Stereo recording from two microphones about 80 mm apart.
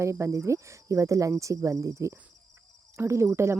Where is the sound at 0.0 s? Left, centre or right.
Right.